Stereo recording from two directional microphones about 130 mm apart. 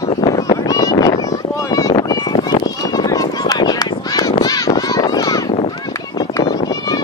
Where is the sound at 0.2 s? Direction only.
30° left (ahead or behind).